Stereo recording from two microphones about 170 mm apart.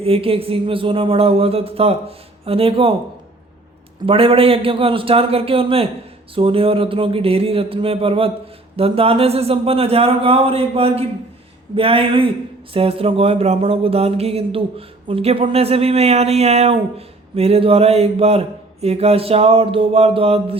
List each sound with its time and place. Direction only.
0.0 s speech: 35° right (ahead or behind)
4.0 s speech: 35° right (ahead or behind)